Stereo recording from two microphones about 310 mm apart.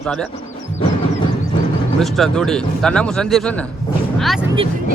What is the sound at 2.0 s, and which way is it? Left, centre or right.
A man's voice, centre.